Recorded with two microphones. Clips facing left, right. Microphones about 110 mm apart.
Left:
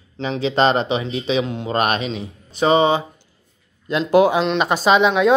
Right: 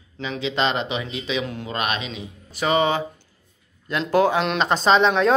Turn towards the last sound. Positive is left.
turn(degrees=5)  # may be behind; listen again after turning